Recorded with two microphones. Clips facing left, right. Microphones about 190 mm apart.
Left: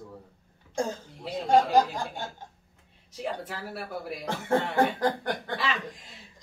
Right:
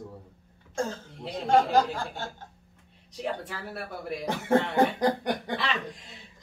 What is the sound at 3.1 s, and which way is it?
Speech, centre (ahead or behind).